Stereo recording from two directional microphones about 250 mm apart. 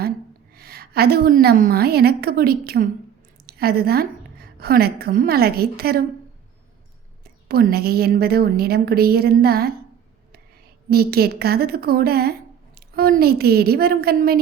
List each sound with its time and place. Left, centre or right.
0.5 s a woman's voice: right
7.4 s a woman's voice: right
10.8 s a woman's voice: right